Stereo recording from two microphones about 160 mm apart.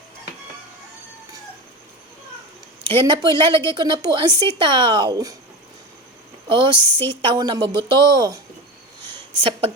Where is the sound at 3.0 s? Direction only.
30° right (ahead or behind).